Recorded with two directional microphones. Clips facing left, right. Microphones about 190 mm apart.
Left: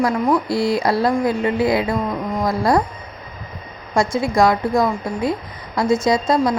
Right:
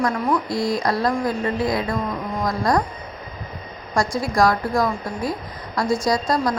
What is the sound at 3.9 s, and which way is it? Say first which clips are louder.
A woman's voice: left 4 dB; 25° left (ahead or behind).